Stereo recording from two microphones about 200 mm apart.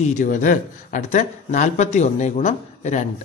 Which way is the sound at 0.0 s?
40° left (ahead or behind).